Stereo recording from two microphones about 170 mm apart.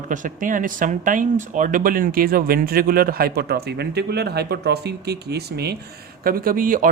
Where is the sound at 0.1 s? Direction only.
50° right (ahead or behind); by 5.7 s 70° right (ahead or behind).